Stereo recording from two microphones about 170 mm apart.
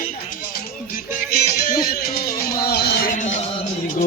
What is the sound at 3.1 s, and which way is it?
Music, 45° left (ahead or behind).